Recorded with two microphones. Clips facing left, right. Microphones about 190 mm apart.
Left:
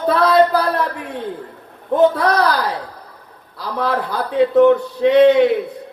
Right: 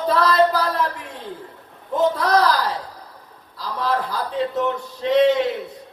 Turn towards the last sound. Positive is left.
turn(degrees=60)  # may be behind; listen again after turning